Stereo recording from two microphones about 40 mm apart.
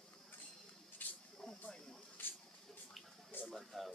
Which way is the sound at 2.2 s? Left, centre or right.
Left.